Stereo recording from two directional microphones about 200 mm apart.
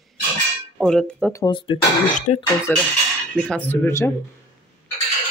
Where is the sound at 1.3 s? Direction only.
20° left (ahead or behind).